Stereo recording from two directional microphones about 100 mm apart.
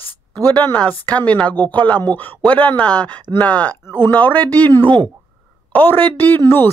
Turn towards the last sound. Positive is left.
turn(degrees=25)  # may be behind; listen again after turning